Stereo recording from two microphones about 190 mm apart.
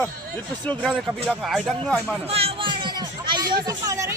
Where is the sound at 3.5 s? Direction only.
20° right (ahead or behind).